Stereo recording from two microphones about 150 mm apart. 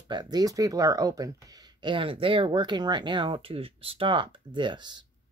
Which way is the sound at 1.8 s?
35° right (ahead or behind).